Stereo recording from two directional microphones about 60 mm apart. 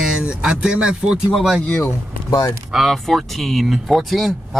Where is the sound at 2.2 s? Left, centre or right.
Left.